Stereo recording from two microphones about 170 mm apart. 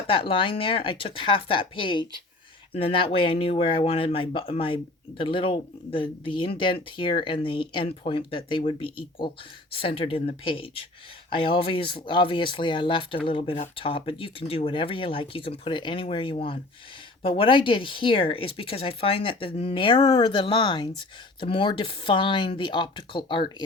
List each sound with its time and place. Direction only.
0.1 s speech: 30° left (ahead or behind)